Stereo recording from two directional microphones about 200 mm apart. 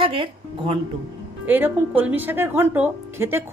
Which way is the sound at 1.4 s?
10° right (ahead or behind).